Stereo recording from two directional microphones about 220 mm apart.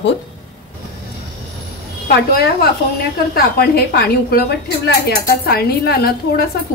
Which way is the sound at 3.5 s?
45° left (ahead or behind).